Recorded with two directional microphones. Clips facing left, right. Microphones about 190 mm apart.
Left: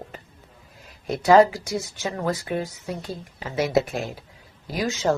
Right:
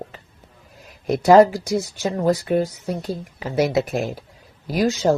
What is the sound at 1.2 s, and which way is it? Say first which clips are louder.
Speech: right 3 dB; 40° right (ahead or behind).